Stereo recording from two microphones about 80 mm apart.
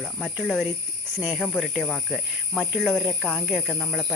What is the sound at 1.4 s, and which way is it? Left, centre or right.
Speech, centre.